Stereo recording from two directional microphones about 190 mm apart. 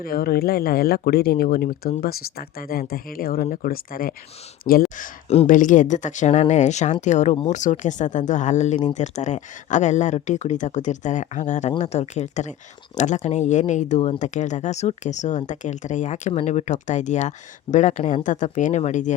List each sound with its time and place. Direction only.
0.0 s speech: 50° left (ahead or behind)